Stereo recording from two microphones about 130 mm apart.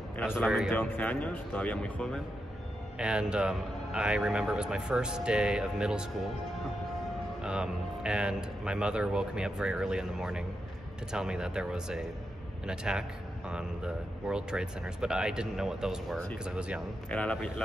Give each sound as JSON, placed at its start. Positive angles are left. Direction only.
{"t": 0.7, "sound": "speech", "side_deg": 15}
{"t": 3.0, "sound": "a man's voice", "side_deg": -5}
{"t": 7.4, "sound": "a man's voice", "side_deg": -5}
{"t": 17.1, "sound": "speech", "side_deg": 10}